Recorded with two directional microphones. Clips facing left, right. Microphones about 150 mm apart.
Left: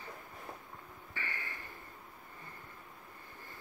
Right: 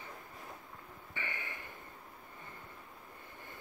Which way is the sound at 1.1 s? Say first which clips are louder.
Right 1 dB; 20° right (ahead or behind).